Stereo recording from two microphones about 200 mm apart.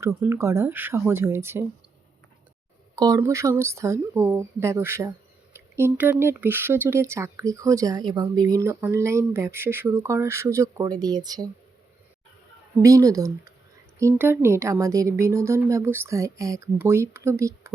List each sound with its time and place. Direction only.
0.0 s speech: 10° right (ahead or behind)
2.9 s speech: 15° right (ahead or behind)
12.8 s speech: 15° right (ahead or behind)